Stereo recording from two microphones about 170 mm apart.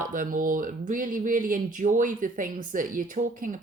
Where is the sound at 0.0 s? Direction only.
55° right (ahead or behind).